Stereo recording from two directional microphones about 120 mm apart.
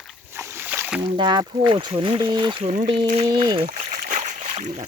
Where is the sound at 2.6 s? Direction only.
75° right (ahead or behind).